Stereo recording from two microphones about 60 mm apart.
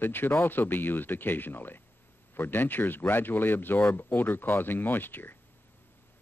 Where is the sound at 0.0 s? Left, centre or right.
Left.